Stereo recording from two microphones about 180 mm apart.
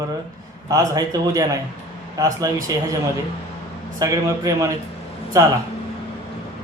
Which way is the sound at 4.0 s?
20° right (ahead or behind).